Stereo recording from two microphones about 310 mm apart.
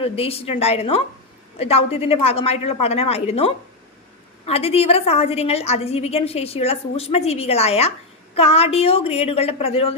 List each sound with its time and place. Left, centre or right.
0.0 s a woman's voice: centre